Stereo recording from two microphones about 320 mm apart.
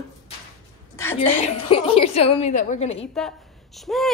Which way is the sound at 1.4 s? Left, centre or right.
Centre.